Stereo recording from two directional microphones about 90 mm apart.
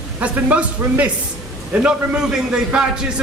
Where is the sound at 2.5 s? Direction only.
10° right (ahead or behind).